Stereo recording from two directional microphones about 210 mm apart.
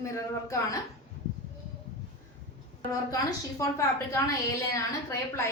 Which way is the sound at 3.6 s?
15° left (ahead or behind).